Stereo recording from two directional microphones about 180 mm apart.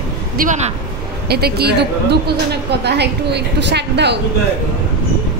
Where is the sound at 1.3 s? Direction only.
60° right (ahead or behind).